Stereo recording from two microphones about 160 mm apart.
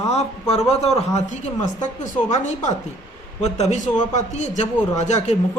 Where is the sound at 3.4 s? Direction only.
45° left (ahead or behind).